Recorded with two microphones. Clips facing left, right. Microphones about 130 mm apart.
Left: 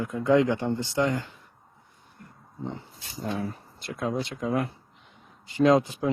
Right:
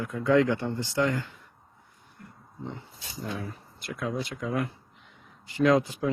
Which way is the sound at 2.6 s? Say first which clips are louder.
Left 3 dB; 30° left (ahead or behind).